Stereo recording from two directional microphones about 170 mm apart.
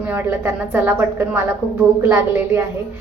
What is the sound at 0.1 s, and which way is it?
A woman's voice, 10° right (ahead or behind).